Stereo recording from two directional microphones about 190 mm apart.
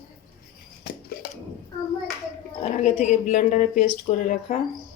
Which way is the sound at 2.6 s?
40° left (ahead or behind).